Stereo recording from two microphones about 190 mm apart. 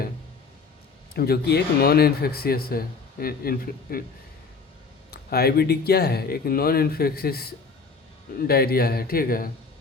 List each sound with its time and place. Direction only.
1.1 s speech: 55° left (ahead or behind)
5.1 s speech: 55° left (ahead or behind)